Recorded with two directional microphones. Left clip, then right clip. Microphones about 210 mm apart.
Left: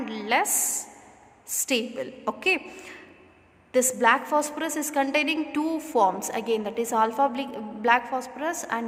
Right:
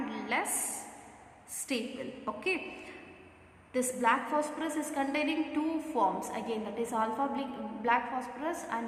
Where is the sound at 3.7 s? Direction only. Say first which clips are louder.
Left 8 dB; 50° left (ahead or behind).